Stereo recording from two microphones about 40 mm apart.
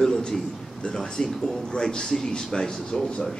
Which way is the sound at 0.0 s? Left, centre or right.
Centre.